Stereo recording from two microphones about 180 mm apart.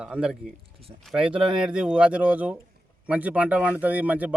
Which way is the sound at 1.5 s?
5° right (ahead or behind).